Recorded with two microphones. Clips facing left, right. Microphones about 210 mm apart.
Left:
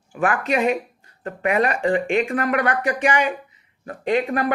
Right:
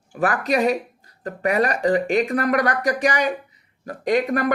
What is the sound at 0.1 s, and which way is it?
Speech, 40° right (ahead or behind).